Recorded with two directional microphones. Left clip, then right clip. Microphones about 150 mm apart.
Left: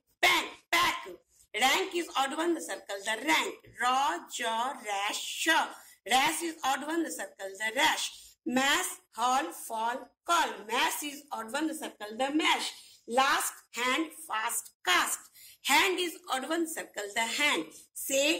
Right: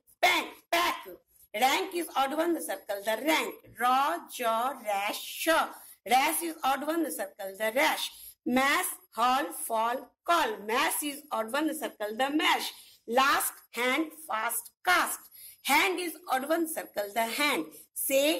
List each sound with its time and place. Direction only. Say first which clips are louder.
0.2 s a sound: even; 50° right (ahead or behind)
1.5 s a woman's voice: even; 50° right (ahead or behind)
12.0 s speech: right 1 dB; 15° right (ahead or behind)
13.7 s a woman's voice: right 1 dB; 50° right (ahead or behind)